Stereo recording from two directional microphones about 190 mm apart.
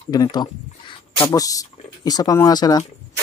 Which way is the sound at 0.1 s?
20° left (ahead or behind).